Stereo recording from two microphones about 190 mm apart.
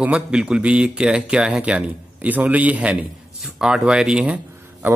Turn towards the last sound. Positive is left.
turn(degrees=-10)  # may be behind; listen again after turning